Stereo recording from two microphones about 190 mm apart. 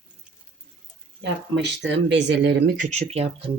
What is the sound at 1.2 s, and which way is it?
Speech, 65° right (ahead or behind).